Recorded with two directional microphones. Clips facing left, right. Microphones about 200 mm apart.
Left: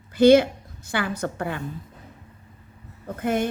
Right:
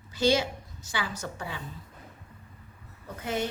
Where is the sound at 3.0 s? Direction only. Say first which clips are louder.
Left 7 dB; 55° left (ahead or behind).